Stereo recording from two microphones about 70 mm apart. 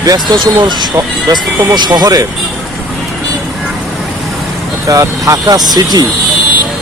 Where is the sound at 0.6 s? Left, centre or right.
Right.